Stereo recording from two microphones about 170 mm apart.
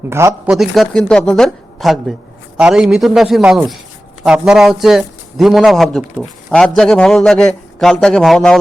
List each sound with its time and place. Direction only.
0.1 s speech: 15° right (ahead or behind)
0.5 s a man's voice: centre (ahead or behind)